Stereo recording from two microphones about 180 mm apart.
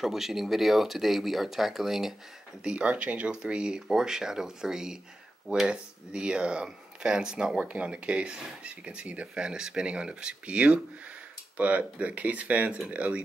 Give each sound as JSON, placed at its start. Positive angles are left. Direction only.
{"t": 0.0, "sound": "speech", "side_deg": 0}